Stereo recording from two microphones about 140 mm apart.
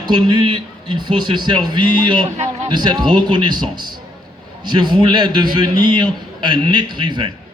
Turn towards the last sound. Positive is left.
turn(degrees=-35)  # may be behind; listen again after turning